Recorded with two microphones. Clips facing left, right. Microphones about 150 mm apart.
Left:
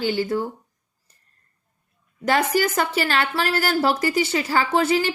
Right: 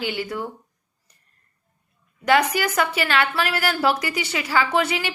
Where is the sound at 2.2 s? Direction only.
40° left (ahead or behind).